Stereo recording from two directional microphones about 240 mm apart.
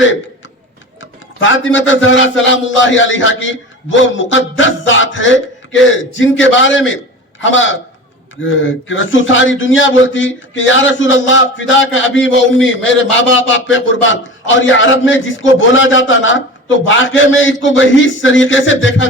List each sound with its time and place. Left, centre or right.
1.4 s a man's voice: left